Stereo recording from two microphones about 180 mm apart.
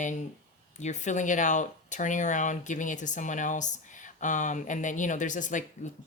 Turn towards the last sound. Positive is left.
turn(degrees=45)  # may be behind; listen again after turning